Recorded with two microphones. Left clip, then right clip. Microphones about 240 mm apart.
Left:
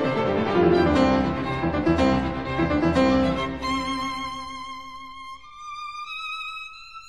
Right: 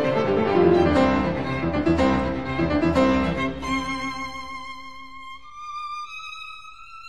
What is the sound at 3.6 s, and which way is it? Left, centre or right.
Music, left.